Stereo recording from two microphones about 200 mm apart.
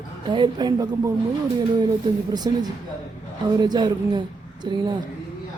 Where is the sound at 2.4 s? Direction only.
20° right (ahead or behind).